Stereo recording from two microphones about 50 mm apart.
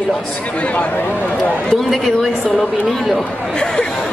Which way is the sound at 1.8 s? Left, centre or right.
Centre.